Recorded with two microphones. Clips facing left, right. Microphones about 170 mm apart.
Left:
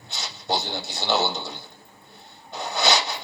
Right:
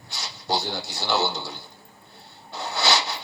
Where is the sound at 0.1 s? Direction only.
20° left (ahead or behind).